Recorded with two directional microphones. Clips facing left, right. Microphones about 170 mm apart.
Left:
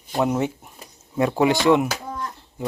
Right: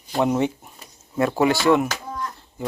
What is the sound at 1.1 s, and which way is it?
Speech, 15° left (ahead or behind).